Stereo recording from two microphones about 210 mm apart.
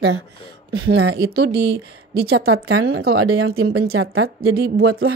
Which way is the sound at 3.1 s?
90° right.